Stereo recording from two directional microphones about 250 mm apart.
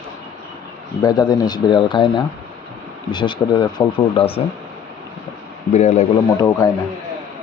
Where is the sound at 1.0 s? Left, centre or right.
Centre.